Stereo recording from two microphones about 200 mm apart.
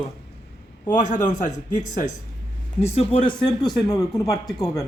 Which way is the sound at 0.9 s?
40° left (ahead or behind).